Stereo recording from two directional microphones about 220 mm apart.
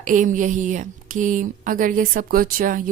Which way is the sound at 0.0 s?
35° right (ahead or behind).